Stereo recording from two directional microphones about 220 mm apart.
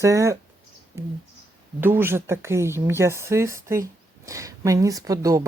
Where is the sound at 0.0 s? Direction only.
15° right (ahead or behind).